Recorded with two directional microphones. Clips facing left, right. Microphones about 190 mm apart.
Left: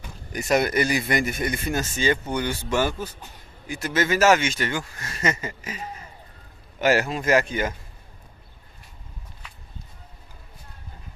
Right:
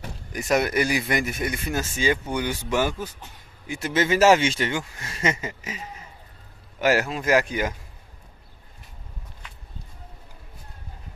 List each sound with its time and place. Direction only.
0.3 s speech: centre (ahead or behind)
6.8 s speech: 5° right (ahead or behind)